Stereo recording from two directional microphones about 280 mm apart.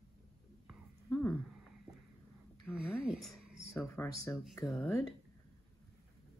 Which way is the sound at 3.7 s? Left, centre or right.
Centre.